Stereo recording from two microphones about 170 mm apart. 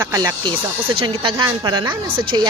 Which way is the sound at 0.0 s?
20° right (ahead or behind).